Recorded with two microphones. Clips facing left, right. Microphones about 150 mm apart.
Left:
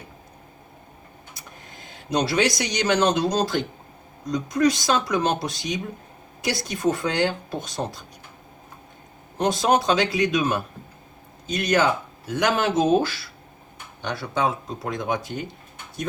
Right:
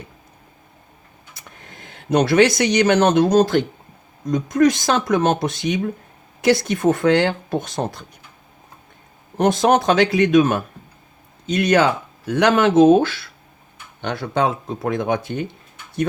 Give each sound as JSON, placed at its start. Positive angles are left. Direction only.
{"t": 1.7, "sound": "speech", "side_deg": -60}
{"t": 9.4, "sound": "speech", "side_deg": -55}
{"t": 11.5, "sound": "speech", "side_deg": -65}